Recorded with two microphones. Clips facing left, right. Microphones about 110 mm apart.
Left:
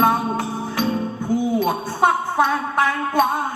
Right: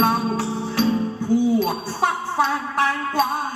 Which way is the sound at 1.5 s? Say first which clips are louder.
Even; 20° left (ahead or behind).